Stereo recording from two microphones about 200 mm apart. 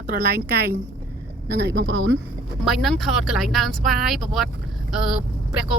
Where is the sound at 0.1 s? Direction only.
50° right (ahead or behind).